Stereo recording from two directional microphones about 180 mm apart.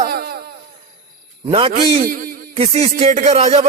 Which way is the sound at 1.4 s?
30° right (ahead or behind).